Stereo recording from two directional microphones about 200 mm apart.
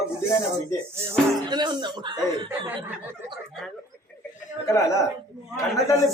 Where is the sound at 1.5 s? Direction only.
20° right (ahead or behind).